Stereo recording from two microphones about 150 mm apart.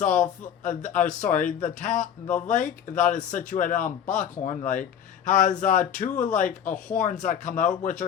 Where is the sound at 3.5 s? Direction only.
60° left (ahead or behind).